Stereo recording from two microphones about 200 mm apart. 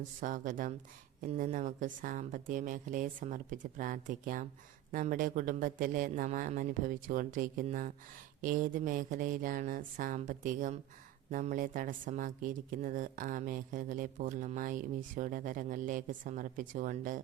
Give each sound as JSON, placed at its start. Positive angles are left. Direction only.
{"t": 0.2, "sound": "speech", "side_deg": -40}